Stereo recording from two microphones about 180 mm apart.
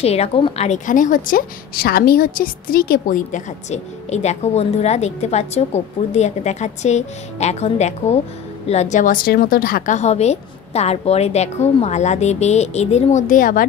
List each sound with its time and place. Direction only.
0.0 s a woman's voice: 35° left (ahead or behind)